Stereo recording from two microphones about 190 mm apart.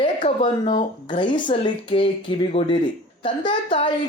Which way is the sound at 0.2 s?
40° left (ahead or behind).